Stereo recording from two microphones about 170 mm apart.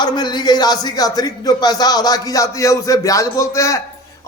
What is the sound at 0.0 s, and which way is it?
A man's voice, 25° left (ahead or behind).